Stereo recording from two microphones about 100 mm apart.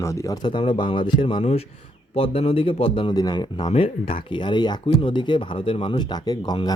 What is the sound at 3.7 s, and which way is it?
Speech, 70° left (ahead or behind).